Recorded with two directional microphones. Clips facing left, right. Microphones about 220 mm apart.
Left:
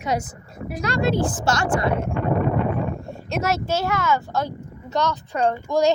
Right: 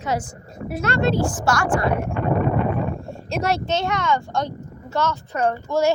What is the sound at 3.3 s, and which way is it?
Speech, 5° left (ahead or behind).